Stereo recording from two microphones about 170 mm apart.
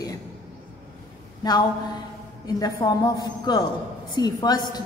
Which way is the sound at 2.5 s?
20° left (ahead or behind).